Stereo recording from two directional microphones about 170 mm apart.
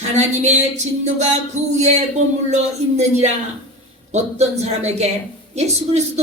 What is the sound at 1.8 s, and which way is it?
A woman's voice, 45° right (ahead or behind).